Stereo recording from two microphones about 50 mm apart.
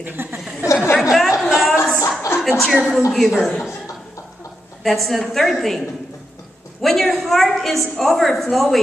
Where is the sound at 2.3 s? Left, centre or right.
Left.